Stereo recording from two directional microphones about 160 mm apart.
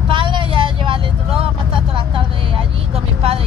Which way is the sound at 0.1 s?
30° right (ahead or behind).